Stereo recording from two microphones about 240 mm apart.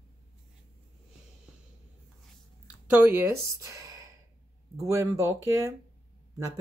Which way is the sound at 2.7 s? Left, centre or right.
Centre.